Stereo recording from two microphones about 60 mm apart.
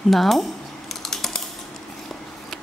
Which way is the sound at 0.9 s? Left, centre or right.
Centre.